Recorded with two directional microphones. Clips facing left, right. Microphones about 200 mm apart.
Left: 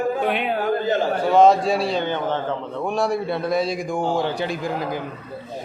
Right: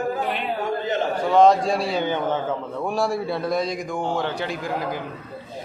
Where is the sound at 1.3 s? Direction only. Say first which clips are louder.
Left 1 dB; 5° left (ahead or behind).